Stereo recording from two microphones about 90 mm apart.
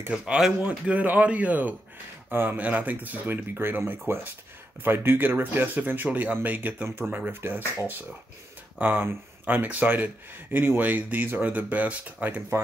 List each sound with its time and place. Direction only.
0.1 s speech: 5° right (ahead or behind)